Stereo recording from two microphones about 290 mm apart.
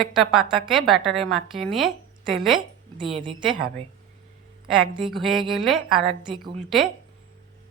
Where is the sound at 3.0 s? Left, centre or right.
Centre.